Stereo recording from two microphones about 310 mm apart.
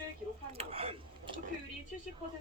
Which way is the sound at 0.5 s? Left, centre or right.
Centre.